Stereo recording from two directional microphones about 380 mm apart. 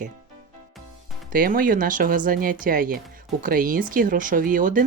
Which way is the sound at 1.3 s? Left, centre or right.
Right.